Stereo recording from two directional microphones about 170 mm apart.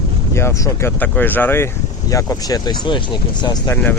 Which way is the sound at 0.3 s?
15° left (ahead or behind).